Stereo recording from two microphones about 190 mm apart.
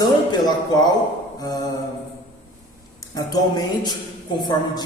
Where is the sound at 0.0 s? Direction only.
20° left (ahead or behind).